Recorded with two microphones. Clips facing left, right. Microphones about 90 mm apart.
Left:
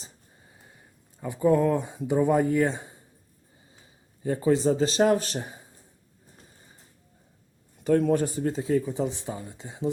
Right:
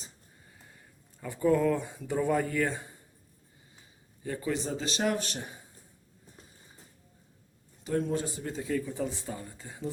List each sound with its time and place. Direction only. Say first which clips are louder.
0.5 s speech: left 2 dB; 25° left (ahead or behind)
4.2 s speech: left 10 dB; 30° left (ahead or behind)
7.9 s speech: left 8 dB; 55° left (ahead or behind)
8.4 s speech: left 8 dB; 35° left (ahead or behind)
8.8 s speech: left 5 dB; 20° left (ahead or behind)